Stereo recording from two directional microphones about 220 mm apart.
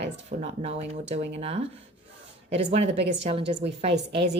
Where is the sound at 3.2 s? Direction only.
25° right (ahead or behind).